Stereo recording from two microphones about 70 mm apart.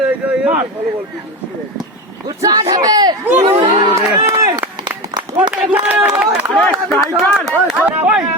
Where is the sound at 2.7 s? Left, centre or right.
Right.